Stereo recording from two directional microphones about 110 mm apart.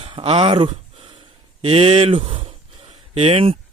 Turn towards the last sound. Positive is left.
turn(degrees=-60)  # may be behind; listen again after turning